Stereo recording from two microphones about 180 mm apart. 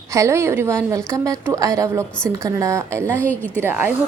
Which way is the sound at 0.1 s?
15° right (ahead or behind).